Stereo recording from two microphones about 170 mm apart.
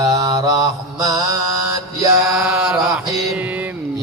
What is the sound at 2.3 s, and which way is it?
Mantra, 5° right (ahead or behind).